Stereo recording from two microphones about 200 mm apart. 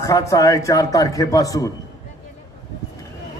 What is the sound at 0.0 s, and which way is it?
A man's voice, 15° left (ahead or behind).